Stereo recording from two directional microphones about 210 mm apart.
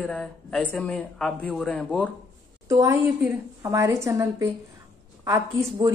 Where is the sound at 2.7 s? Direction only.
15° right (ahead or behind).